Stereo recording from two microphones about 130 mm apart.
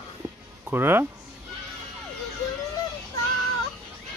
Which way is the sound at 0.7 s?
15° right (ahead or behind).